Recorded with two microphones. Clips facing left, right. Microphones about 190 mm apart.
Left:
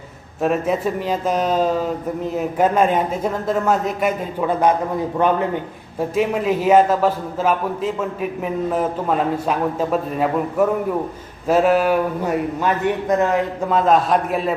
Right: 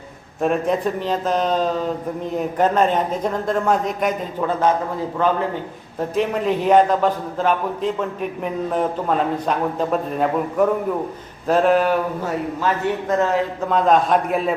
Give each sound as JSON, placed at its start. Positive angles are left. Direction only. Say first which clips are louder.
{"t": 0.4, "sound": "speech", "louder": "even", "side_deg": 5}
{"t": 6.0, "sound": "a man's voice", "louder": "left 1 dB", "side_deg": 5}
{"t": 13.7, "sound": "a man's voice", "louder": "even", "side_deg": 0}